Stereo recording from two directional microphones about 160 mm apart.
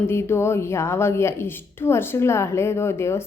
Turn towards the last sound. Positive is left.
turn(degrees=15)  # may be behind; listen again after turning